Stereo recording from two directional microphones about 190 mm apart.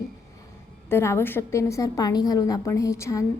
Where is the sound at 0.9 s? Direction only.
15° left (ahead or behind).